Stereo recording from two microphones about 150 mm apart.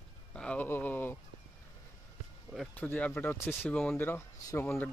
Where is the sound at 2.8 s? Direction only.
10° left (ahead or behind).